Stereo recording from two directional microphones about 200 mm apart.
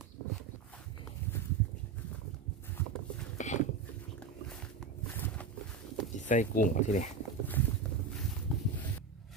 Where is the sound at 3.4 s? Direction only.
35° left (ahead or behind).